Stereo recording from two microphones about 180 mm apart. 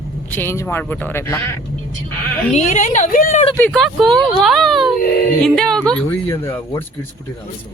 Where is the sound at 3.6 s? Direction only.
Centre (ahead or behind).